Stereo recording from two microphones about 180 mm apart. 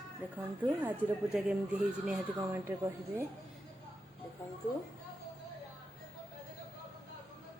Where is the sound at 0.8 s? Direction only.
10° right (ahead or behind).